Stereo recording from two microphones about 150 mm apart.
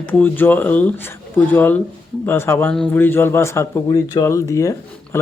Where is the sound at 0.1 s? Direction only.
15° left (ahead or behind).